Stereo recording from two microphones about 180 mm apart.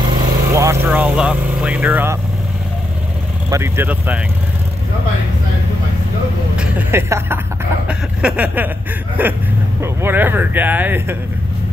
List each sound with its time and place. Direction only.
0.5 s speech: 15° right (ahead or behind)
3.4 s speech: 15° right (ahead or behind)
6.5 s speech: 10° right (ahead or behind)